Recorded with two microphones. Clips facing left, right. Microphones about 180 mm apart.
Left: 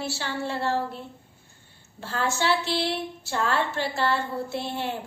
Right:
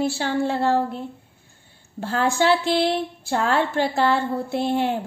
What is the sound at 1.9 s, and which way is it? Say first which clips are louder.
A woman's voice: right 7 dB; 50° right (ahead or behind).